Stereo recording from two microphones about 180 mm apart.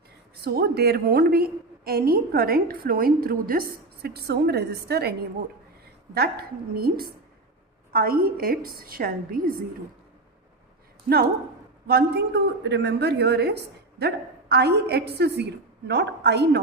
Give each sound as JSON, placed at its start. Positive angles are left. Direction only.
{"t": 0.4, "sound": "a woman's voice", "side_deg": -60}
{"t": 6.1, "sound": "a woman's voice", "side_deg": -60}
{"t": 11.9, "sound": "a woman's voice", "side_deg": -60}